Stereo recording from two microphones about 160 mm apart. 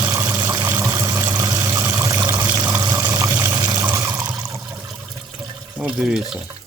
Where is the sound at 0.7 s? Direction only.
20° right (ahead or behind).